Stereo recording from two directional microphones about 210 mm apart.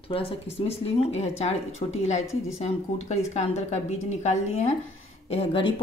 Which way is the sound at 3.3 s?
30° left (ahead or behind).